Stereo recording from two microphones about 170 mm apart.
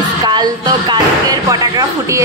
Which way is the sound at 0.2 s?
25° right (ahead or behind).